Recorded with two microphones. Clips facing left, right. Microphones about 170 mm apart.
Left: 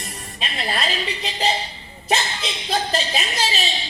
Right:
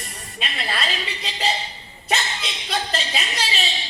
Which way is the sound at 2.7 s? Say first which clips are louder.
Left 3 dB; 40° left (ahead or behind).